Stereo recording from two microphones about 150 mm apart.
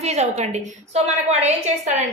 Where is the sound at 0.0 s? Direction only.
45° right (ahead or behind).